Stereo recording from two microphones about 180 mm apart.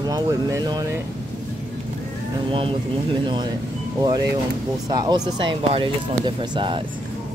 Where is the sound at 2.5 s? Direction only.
30° right (ahead or behind).